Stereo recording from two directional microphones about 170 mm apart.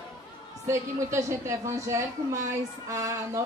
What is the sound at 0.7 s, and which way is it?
A woman's voice, 15° right (ahead or behind).